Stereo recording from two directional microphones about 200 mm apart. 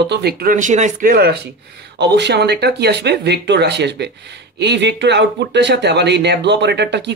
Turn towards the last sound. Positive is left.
turn(degrees=-60)  # may be behind; listen again after turning